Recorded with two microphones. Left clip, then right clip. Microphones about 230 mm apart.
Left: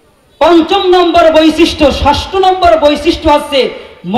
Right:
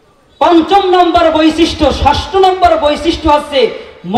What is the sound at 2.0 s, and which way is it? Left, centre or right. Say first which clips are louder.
Speech: even; left.